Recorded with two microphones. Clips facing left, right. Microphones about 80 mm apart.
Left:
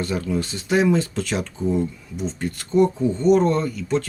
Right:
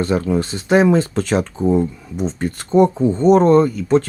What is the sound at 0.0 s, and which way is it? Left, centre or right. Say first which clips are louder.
Speech: right 6 dB; right.